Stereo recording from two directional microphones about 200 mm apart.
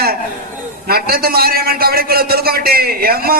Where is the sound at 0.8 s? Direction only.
50° right (ahead or behind).